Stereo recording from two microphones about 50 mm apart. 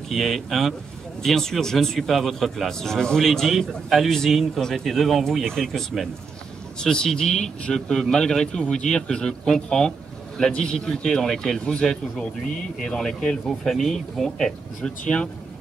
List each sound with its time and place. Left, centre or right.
0.1 s a man's voice: centre
2.9 s speech: centre
3.2 s a man's voice: centre
14.8 s speech: centre